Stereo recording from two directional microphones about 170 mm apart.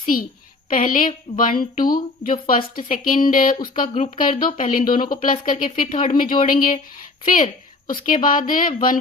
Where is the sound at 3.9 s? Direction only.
40° left (ahead or behind).